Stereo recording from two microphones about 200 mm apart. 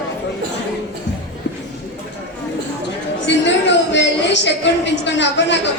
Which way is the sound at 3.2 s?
65° left (ahead or behind).